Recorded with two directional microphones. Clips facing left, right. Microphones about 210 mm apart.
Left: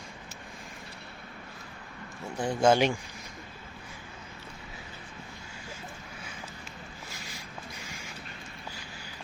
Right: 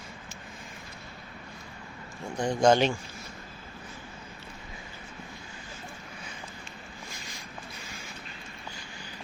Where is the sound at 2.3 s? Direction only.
5° left (ahead or behind).